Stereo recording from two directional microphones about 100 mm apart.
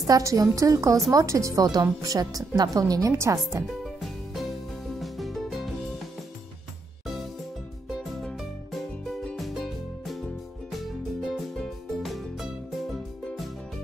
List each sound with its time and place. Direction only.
0.0 s speech: 35° right (ahead or behind)
3.8 s music: centre (ahead or behind)
7.9 s music: centre (ahead or behind)